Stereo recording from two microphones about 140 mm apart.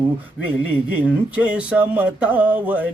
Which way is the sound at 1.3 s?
10° right (ahead or behind).